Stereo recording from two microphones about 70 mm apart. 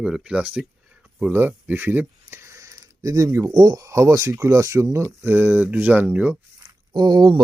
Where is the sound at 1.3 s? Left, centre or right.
Right.